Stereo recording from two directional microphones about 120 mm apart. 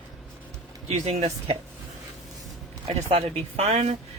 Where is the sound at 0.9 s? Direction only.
65° right (ahead or behind).